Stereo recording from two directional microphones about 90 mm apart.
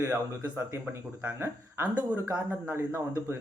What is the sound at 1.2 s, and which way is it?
Speech, 25° right (ahead or behind).